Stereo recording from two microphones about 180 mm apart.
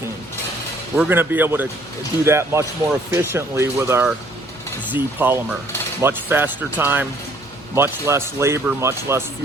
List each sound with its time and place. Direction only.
0.9 s speech: 10° right (ahead or behind)